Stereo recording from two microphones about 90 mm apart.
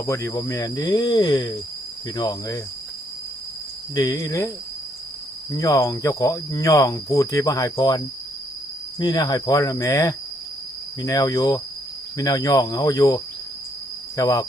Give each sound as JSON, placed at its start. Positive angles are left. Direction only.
{"t": 0.0, "sound": "speech", "side_deg": 35}
{"t": 3.9, "sound": "cricket", "side_deg": 45}
{"t": 5.5, "sound": "cricket", "side_deg": 40}
{"t": 9.0, "sound": "speech", "side_deg": 50}